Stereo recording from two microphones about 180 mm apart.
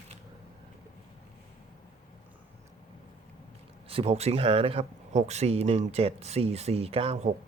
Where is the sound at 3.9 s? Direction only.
35° right (ahead or behind).